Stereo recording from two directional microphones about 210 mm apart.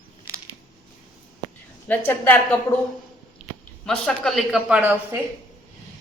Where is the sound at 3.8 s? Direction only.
Centre (ahead or behind).